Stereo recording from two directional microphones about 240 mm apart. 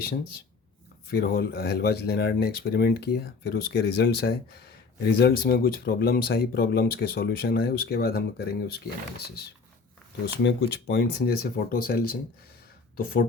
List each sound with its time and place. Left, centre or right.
1.1 s speech: left
10.4 s speech: left